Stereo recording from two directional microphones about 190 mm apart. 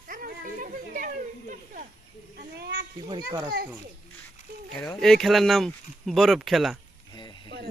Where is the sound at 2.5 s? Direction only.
60° right (ahead or behind).